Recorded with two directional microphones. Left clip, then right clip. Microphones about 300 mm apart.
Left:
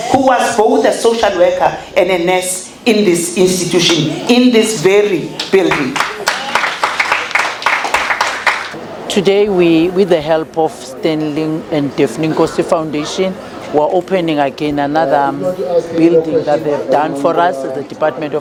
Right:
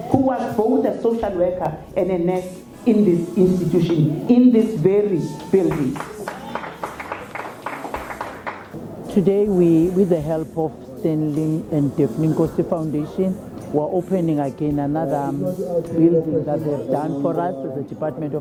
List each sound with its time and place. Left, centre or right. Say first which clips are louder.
0.3 s speech: left 10 dB; centre
3.5 s a sound: left 8 dB; centre
9.0 s speech: left 7 dB; centre
13.7 s speech: left 9 dB; left
14.1 s speech: left 8 dB; centre